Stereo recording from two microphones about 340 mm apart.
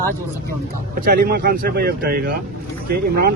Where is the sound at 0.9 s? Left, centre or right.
Right.